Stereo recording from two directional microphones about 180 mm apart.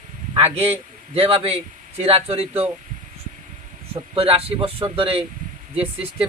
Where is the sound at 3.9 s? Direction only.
30° right (ahead or behind).